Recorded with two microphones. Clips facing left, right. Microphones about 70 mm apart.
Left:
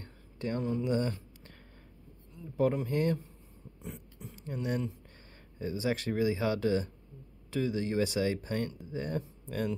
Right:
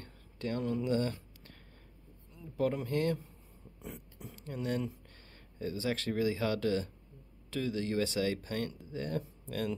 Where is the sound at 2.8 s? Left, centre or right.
Left.